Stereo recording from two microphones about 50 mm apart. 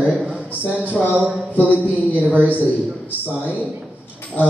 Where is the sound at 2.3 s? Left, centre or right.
Left.